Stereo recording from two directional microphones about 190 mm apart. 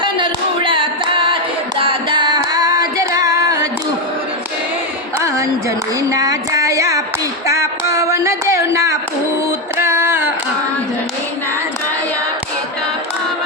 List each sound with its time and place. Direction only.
0.0 s singing: 25° right (ahead or behind)
1.8 s music: 25° right (ahead or behind)
5.2 s a sound: 15° right (ahead or behind)